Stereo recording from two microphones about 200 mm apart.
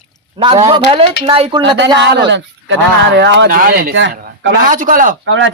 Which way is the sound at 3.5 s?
45° right (ahead or behind).